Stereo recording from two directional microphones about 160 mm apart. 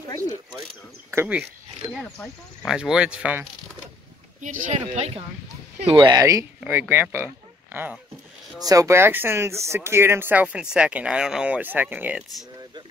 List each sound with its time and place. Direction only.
0.0 s a sound: 20° left (ahead or behind)
1.1 s speech: 10° right (ahead or behind)
2.6 s speech: 5° right (ahead or behind)
4.4 s speech: 55° right (ahead or behind)
5.9 s speech: 30° right (ahead or behind); by 12.4 s 5° right (ahead or behind)